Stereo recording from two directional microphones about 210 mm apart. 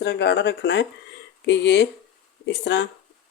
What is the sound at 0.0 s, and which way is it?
Speech, 50° left (ahead or behind).